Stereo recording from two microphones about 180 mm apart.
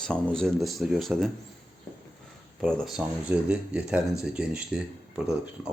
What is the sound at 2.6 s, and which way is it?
A man's voice, centre (ahead or behind).